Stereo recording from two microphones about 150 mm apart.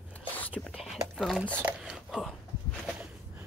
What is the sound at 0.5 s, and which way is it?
Speech, centre (ahead or behind).